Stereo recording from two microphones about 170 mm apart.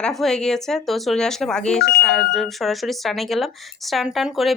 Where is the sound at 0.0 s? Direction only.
Centre (ahead or behind).